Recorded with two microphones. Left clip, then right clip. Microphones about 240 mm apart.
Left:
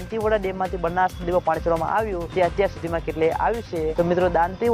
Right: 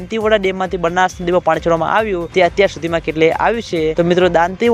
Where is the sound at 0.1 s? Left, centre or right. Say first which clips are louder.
Right 8 dB; right.